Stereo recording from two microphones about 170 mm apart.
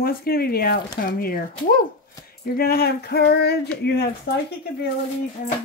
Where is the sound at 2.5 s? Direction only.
65° left (ahead or behind).